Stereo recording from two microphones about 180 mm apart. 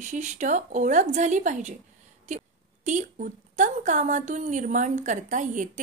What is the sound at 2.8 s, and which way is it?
Speech, 45° right (ahead or behind).